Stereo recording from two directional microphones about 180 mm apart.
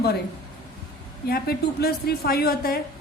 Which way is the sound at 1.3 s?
60° left (ahead or behind).